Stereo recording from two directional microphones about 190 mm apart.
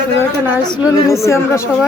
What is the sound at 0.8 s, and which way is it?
Speech, 15° left (ahead or behind).